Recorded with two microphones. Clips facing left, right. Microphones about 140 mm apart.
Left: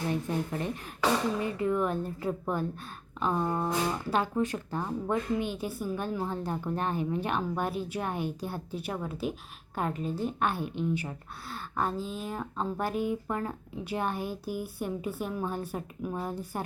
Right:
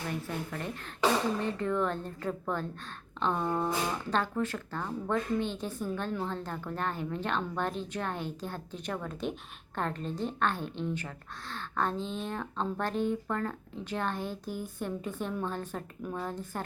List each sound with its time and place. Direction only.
0.3 s speech: 20° left (ahead or behind)
1.4 s a woman's voice: 10° left (ahead or behind)